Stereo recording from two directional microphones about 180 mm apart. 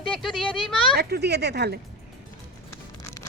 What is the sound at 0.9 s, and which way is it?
Speech, 65° right (ahead or behind).